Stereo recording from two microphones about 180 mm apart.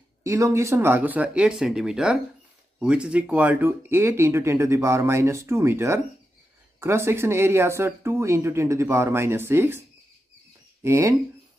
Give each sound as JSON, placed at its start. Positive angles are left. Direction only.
{"t": 0.2, "sound": "speech", "side_deg": -15}